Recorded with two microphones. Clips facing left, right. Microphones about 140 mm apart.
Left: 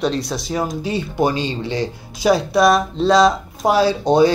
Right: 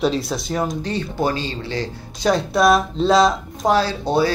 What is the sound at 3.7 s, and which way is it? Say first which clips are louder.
Speech: left 3 dB; 15° left (ahead or behind).